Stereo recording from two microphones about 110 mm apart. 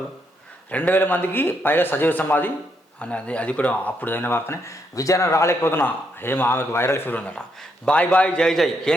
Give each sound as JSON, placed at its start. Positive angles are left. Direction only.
{"t": 0.7, "sound": "speech", "side_deg": 15}